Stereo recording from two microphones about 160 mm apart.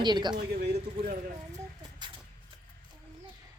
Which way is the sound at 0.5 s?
90° right.